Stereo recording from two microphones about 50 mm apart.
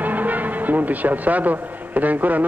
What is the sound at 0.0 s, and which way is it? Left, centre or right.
Speech, right.